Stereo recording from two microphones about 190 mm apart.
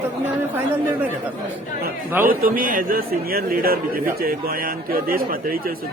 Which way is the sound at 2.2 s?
45° right (ahead or behind).